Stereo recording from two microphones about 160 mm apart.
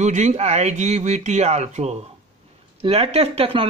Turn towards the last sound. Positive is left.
turn(degrees=-40)  # may be behind; listen again after turning